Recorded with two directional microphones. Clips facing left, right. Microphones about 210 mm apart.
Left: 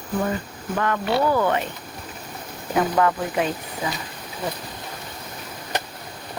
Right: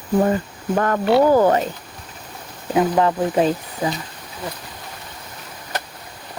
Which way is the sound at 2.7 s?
25° right (ahead or behind).